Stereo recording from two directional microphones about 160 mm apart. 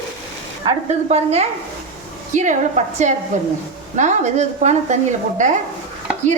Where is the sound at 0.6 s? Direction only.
45° right (ahead or behind).